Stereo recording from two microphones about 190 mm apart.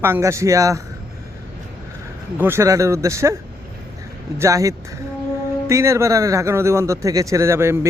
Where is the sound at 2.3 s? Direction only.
10° right (ahead or behind).